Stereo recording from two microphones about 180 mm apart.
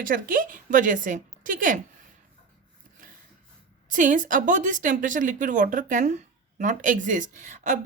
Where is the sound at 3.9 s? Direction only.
45° right (ahead or behind).